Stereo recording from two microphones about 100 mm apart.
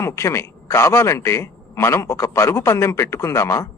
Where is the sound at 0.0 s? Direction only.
30° left (ahead or behind).